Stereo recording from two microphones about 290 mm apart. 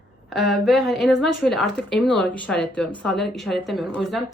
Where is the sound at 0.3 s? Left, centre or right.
Centre.